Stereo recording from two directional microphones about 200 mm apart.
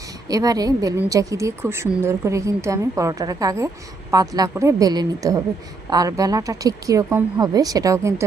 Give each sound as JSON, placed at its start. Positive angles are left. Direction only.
{"t": 0.3, "sound": "a woman's voice", "side_deg": -20}